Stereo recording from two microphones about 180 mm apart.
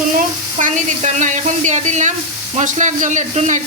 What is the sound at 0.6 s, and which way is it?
Speech, 40° right (ahead or behind).